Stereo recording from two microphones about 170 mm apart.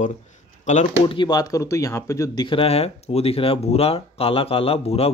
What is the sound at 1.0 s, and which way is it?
Speech, 25° left (ahead or behind).